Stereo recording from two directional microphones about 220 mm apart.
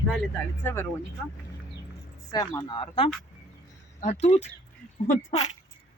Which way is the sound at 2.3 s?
15° left (ahead or behind).